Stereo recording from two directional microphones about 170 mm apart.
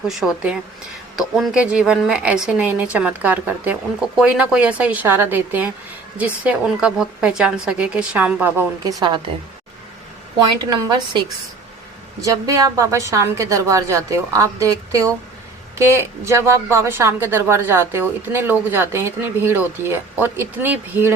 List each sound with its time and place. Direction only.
0.1 s a woman's voice: 5° right (ahead or behind)
8.8 s a woman's voice: 20° right (ahead or behind)
10.6 s a woman's voice: 25° right (ahead or behind)